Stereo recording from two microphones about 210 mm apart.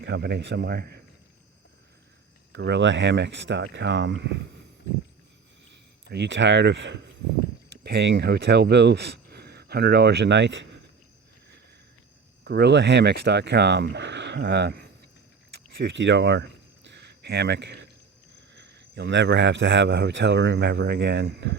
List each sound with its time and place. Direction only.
0.0 s speech: 55° right (ahead or behind)
2.5 s speech: 55° right (ahead or behind)
6.1 s speech: 60° right (ahead or behind)
12.5 s speech: 50° right (ahead or behind)
15.5 s a sound: 55° right (ahead or behind)
18.5 s speech: 55° right (ahead or behind)